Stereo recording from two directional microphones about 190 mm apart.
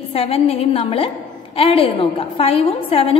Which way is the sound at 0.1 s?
30° left (ahead or behind).